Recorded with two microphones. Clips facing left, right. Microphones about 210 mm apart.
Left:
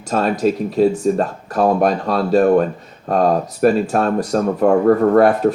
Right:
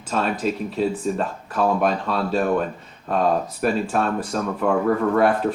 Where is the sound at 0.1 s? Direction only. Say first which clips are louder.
Left 6 dB; 40° left (ahead or behind).